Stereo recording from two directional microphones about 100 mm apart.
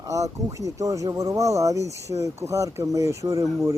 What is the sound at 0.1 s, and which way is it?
Speech, 35° right (ahead or behind).